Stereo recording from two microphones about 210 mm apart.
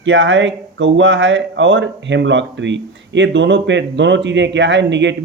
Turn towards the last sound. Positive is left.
turn(degrees=-55)  # may be behind; listen again after turning